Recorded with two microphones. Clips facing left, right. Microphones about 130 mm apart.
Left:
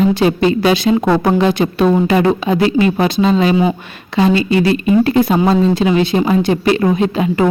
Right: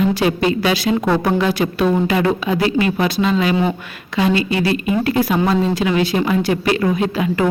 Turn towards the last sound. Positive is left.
turn(degrees=25)  # may be behind; listen again after turning